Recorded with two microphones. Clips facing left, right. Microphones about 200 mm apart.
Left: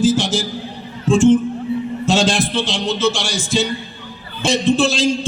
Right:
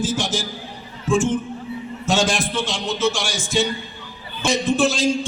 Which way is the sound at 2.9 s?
75° left (ahead or behind).